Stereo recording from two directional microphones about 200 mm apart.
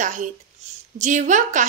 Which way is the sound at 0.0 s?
40° right (ahead or behind).